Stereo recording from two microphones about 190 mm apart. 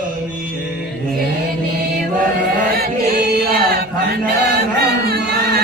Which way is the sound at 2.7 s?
55° right (ahead or behind).